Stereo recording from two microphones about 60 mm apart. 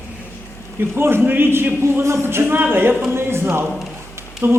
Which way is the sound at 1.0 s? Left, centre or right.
Right.